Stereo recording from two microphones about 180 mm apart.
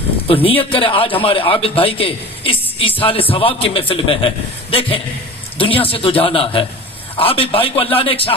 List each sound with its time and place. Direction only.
0.3 s a man's voice: 30° left (ahead or behind)